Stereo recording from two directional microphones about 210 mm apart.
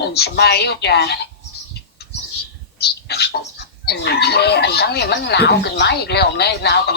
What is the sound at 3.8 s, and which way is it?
Speech, 50° left (ahead or behind).